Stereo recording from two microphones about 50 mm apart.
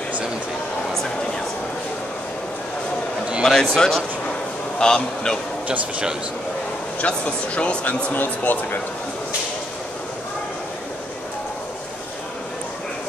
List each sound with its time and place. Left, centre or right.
3.4 s a man's voice: centre
5.7 s speech: right
7.0 s speech: left
8.1 s speech: left